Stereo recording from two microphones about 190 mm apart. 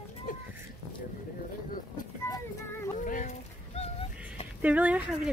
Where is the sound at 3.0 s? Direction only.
45° left (ahead or behind).